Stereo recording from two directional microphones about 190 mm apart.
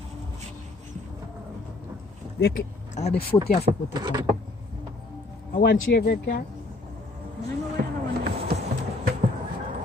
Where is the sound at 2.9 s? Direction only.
35° left (ahead or behind).